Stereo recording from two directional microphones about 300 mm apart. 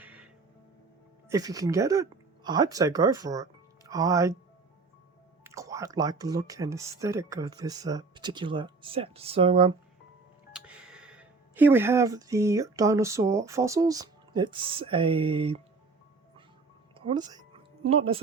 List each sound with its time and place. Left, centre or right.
0.0 s music: centre
1.3 s speech: centre
5.4 s speech: centre
10.5 s speech: centre
17.0 s music: centre